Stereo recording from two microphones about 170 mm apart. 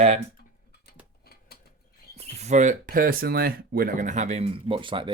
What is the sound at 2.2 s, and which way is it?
Speech, 40° right (ahead or behind).